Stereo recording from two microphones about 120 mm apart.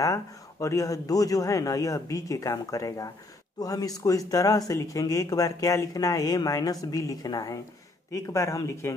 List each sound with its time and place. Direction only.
0.0 s speech: 25° left (ahead or behind)